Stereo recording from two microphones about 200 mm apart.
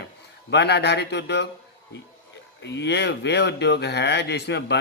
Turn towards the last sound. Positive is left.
turn(degrees=60)  # may be behind; listen again after turning